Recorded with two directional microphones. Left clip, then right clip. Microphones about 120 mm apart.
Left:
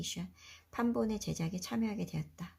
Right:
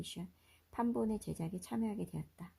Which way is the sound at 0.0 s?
45° right (ahead or behind).